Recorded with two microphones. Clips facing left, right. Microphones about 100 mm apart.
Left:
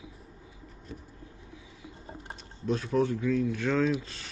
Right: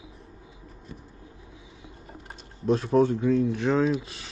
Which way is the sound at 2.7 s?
30° right (ahead or behind).